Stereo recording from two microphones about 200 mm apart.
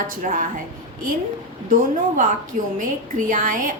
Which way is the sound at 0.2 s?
40° right (ahead or behind).